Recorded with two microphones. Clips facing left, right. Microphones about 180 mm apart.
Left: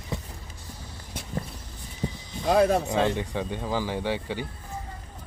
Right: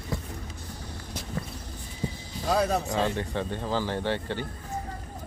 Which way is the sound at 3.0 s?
15° left (ahead or behind).